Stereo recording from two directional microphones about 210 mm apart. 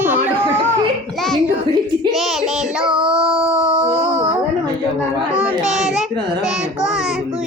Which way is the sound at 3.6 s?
5° right (ahead or behind).